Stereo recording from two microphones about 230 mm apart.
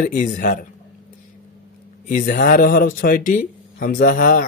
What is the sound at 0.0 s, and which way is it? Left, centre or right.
Speech, left.